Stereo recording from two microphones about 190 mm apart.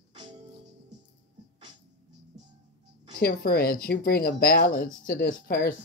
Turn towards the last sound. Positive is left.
turn(degrees=50)  # may be behind; listen again after turning